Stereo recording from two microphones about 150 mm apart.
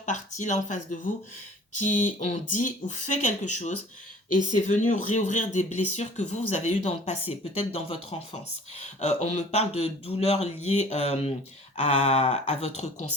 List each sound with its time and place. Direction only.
0.0 s speech: 55° left (ahead or behind)